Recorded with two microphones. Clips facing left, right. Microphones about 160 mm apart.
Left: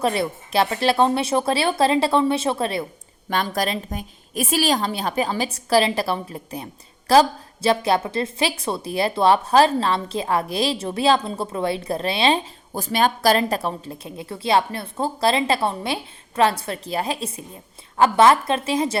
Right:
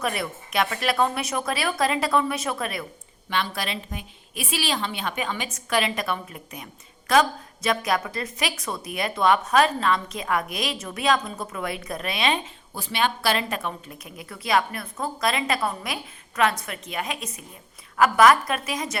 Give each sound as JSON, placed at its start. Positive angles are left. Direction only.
{"t": 0.0, "sound": "speech", "side_deg": 30}
{"t": 3.2, "sound": "a woman's voice", "side_deg": 45}
{"t": 12.7, "sound": "a woman's voice", "side_deg": 45}